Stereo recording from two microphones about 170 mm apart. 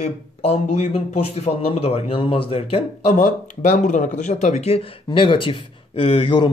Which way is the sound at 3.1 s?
50° left (ahead or behind).